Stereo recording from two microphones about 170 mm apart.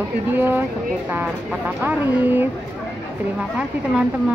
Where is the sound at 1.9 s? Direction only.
10° right (ahead or behind).